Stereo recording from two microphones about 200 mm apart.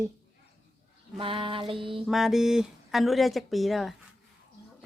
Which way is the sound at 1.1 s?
25° right (ahead or behind).